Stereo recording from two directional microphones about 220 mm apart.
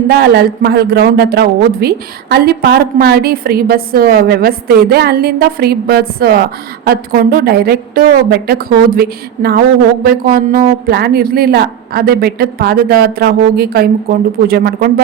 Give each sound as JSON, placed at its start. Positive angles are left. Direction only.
{"t": 0.1, "sound": "a woman's voice", "side_deg": -45}